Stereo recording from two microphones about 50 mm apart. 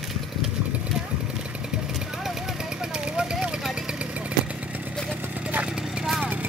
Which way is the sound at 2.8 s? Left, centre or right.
Centre.